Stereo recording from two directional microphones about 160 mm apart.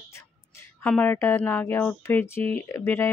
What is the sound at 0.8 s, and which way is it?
Speech, 10° left (ahead or behind).